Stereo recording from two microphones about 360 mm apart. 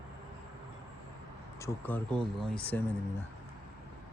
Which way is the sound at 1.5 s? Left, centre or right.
Centre.